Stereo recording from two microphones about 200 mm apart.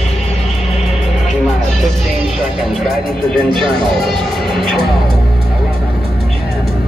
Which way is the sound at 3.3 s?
Centre (ahead or behind).